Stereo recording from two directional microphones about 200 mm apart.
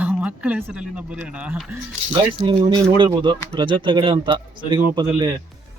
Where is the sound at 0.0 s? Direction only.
5° right (ahead or behind).